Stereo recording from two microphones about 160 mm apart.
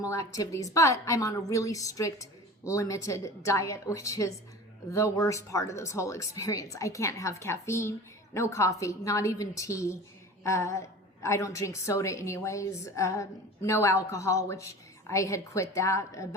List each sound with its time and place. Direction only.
0.0 s a woman's voice: 20° left (ahead or behind)